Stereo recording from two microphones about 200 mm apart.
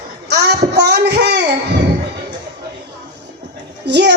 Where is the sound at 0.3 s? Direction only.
55° right (ahead or behind).